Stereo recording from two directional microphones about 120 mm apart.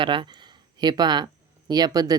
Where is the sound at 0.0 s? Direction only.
45° right (ahead or behind).